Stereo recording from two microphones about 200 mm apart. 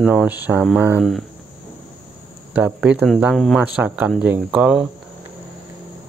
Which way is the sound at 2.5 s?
5° right (ahead or behind).